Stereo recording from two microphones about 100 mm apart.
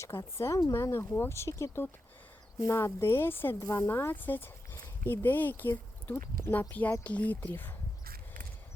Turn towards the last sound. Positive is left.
turn(degrees=20)  # may be behind; listen again after turning